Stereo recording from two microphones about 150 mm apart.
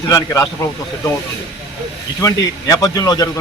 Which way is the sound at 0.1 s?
25° left (ahead or behind).